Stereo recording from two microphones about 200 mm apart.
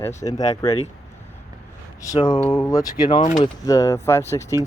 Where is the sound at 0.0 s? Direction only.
15° left (ahead or behind).